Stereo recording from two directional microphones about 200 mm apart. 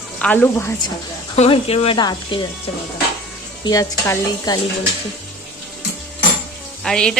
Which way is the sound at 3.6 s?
15° left (ahead or behind).